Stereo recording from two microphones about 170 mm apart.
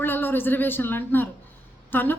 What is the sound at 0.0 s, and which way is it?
Speech, 10° left (ahead or behind).